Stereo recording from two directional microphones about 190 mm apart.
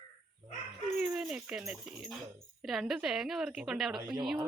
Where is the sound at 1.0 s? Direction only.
5° right (ahead or behind).